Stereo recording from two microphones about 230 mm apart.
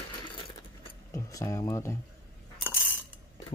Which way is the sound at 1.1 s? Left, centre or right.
Centre.